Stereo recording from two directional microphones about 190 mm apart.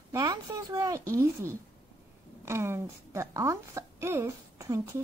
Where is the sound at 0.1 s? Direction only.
20° right (ahead or behind).